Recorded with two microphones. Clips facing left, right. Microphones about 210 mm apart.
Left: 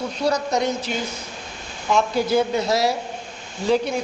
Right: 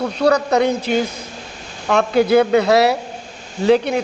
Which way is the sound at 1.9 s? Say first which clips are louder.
Right 6 dB; 65° right (ahead or behind).